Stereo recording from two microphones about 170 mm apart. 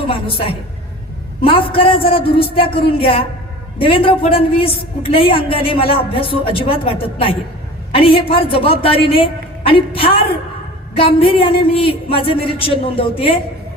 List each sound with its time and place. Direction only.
0.1 s a woman's voice: 35° left (ahead or behind)